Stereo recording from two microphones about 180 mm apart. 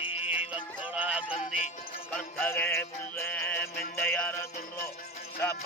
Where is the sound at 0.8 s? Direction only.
5° right (ahead or behind).